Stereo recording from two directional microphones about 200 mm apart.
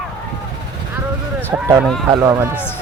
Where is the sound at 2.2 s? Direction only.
20° right (ahead or behind).